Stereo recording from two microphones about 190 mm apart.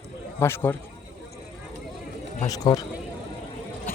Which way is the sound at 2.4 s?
20° left (ahead or behind).